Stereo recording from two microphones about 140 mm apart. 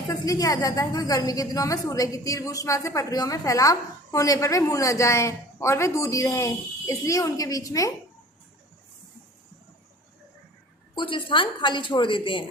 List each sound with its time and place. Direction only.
0.1 s a woman's voice: 25° left (ahead or behind)
10.9 s a woman's voice: 35° left (ahead or behind)